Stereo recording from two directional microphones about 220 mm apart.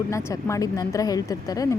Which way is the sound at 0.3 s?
15° left (ahead or behind).